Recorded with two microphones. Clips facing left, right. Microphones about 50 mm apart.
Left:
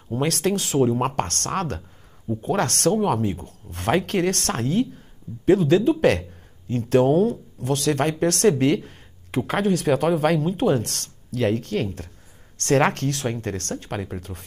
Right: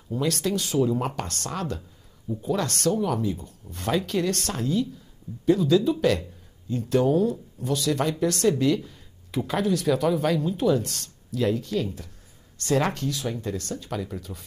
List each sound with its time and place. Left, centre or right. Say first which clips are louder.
0.1 s speech: left 3 dB; left